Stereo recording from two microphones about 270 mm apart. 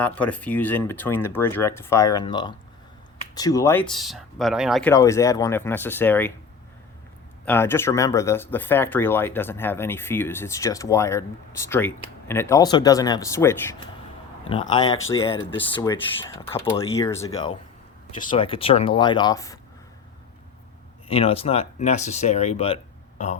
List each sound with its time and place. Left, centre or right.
0.0 s speech: centre
7.4 s speech: centre
21.1 s speech: left